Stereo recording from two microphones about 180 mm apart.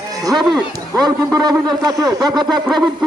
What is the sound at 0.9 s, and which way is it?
A man's voice, 20° right (ahead or behind).